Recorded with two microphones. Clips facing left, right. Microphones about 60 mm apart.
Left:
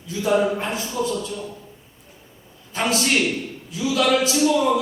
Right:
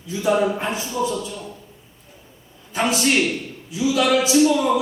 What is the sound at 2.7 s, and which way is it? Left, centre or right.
Speech, centre.